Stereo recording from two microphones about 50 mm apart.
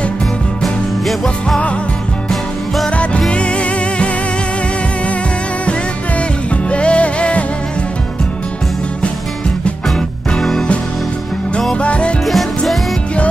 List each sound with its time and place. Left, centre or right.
3.0 s music: left
6.7 s music: left
11.8 s music: left
12.3 s music: centre